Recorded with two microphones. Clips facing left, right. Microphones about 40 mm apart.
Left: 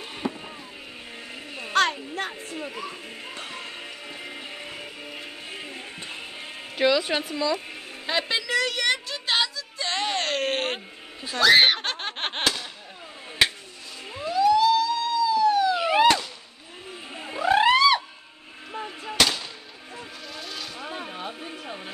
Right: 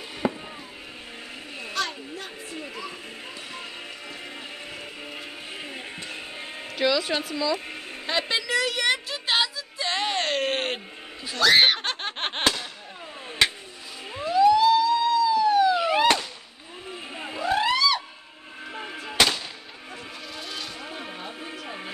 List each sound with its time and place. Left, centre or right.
0.2 s chop: right
1.7 s a sound: left
2.5 s a sound: centre
5.1 s music: centre
6.8 s speech: centre
7.5 s speech: centre
8.1 s a sound: centre
11.3 s giggle: centre
14.2 s police car: centre
17.5 s music: left
18.7 s artillery fire: centre
20.3 s vehicle: centre